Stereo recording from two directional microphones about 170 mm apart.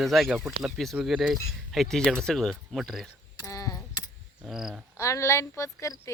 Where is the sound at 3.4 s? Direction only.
20° left (ahead or behind).